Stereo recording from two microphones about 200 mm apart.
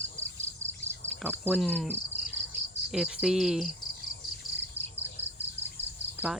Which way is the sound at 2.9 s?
Centre (ahead or behind).